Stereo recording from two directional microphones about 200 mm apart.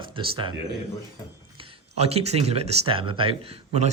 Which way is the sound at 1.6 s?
30° right (ahead or behind).